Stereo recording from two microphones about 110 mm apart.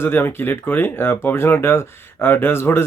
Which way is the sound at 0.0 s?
20° left (ahead or behind).